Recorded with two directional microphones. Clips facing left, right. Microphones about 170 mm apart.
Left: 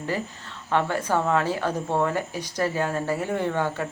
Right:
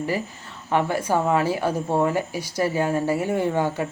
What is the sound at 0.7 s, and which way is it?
Speech, 10° right (ahead or behind).